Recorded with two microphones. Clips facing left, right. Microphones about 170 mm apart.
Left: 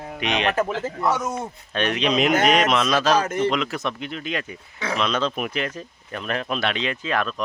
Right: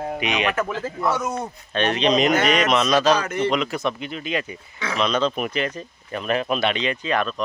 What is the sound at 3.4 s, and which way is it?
Speech, centre (ahead or behind).